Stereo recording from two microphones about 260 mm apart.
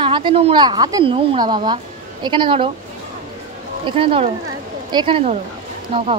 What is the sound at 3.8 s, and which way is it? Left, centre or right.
A woman's voice, right.